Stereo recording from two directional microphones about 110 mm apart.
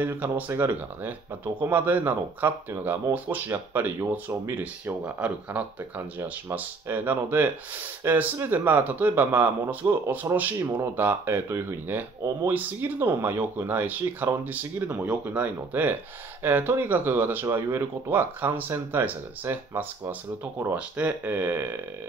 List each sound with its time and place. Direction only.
0.0 s speech: 20° right (ahead or behind)